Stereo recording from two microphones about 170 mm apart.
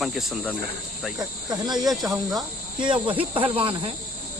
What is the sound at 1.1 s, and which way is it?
Speech, 20° right (ahead or behind).